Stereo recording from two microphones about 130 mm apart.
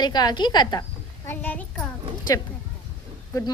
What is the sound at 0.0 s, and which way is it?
Speech, 30° left (ahead or behind).